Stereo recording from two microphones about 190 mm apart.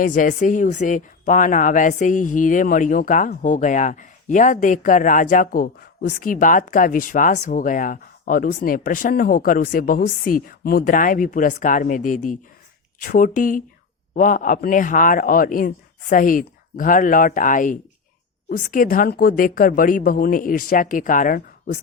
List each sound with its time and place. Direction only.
0.0 s speech: 45° left (ahead or behind)